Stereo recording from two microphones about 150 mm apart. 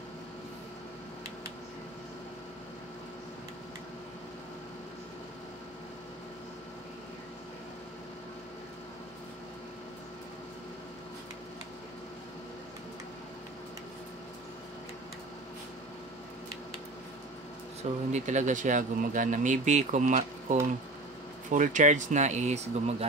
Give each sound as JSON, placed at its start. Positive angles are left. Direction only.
{"t": 18.1, "sound": "speech", "side_deg": -55}